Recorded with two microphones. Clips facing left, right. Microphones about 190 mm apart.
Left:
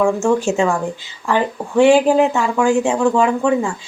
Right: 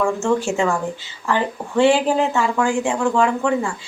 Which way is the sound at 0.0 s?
15° left (ahead or behind).